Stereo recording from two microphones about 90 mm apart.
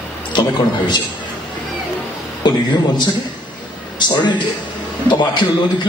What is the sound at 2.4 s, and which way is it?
Speech, 60° left (ahead or behind).